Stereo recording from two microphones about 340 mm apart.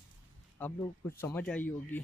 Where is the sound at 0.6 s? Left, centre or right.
Centre.